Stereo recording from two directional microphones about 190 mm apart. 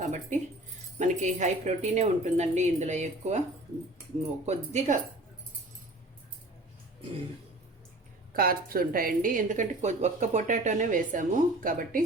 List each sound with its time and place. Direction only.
0.0 s speech: 40° right (ahead or behind)
8.3 s speech: 50° right (ahead or behind)